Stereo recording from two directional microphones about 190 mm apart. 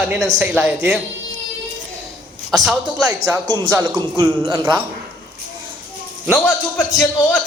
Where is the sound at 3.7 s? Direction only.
15° right (ahead or behind).